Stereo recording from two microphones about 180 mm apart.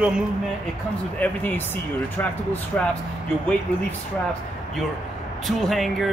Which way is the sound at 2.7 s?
10° left (ahead or behind).